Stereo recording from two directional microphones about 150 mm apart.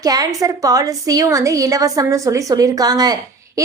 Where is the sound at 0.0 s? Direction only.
25° right (ahead or behind).